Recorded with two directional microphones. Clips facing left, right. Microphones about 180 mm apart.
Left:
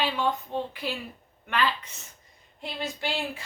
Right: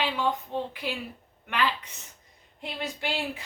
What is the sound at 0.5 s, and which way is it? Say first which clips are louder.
Speech: even; 15° left (ahead or behind).